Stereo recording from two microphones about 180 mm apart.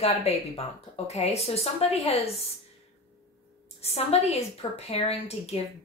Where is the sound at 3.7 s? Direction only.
35° left (ahead or behind).